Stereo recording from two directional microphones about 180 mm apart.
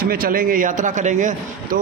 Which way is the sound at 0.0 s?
55° right (ahead or behind).